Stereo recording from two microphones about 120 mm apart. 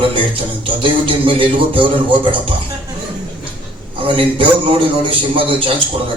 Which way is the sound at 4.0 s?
45° right (ahead or behind).